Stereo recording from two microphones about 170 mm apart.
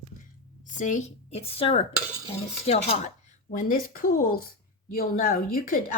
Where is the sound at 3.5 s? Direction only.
50° left (ahead or behind).